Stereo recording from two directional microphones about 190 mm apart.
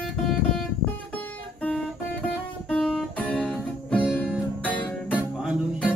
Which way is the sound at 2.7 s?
Centre (ahead or behind).